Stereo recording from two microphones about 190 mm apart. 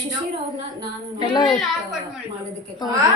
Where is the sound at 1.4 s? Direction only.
Centre (ahead or behind).